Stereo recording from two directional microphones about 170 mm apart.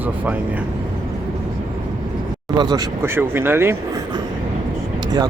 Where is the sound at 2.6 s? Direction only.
25° right (ahead or behind).